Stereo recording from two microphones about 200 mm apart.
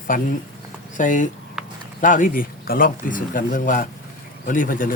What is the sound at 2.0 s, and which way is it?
Speech, 40° left (ahead or behind).